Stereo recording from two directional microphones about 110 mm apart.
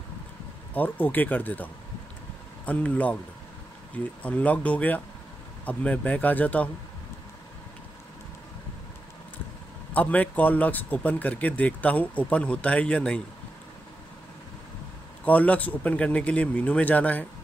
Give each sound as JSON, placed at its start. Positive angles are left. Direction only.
{"t": 0.7, "sound": "speech", "side_deg": 15}
{"t": 9.9, "sound": "speech", "side_deg": 15}
{"t": 15.2, "sound": "speech", "side_deg": 15}